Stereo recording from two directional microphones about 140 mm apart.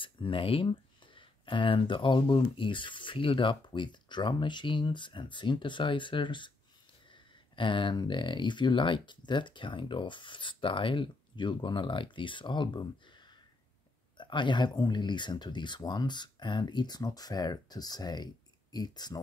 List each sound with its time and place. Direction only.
0.0 s speech: 40° left (ahead or behind)
7.5 s speech: 35° left (ahead or behind)
14.1 s speech: 35° left (ahead or behind)